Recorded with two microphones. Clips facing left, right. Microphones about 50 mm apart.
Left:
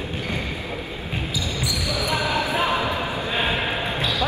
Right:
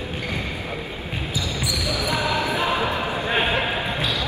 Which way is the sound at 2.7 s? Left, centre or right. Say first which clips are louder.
Right 1 dB; right.